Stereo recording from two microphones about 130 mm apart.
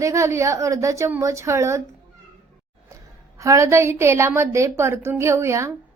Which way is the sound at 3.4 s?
25° right (ahead or behind).